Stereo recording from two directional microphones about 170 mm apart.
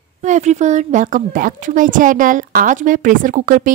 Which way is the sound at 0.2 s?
45° right (ahead or behind).